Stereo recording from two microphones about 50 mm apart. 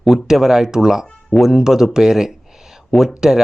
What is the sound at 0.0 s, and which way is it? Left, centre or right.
Speech, centre.